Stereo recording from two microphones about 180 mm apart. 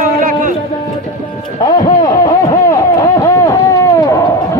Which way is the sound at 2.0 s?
20° left (ahead or behind).